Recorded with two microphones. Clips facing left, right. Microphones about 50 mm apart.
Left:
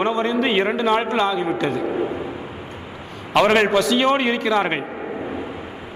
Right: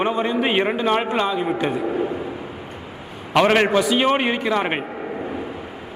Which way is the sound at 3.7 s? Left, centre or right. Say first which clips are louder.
Even; centre.